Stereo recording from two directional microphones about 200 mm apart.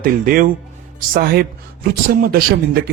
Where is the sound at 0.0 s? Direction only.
45° right (ahead or behind).